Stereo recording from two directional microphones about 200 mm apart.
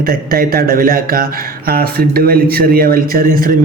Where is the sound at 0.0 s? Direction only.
45° right (ahead or behind).